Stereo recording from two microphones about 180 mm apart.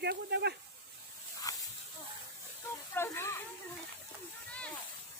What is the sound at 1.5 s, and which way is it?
Snake, 20° left (ahead or behind).